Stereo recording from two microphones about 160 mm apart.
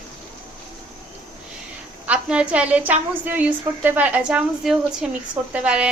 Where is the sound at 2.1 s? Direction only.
5° right (ahead or behind).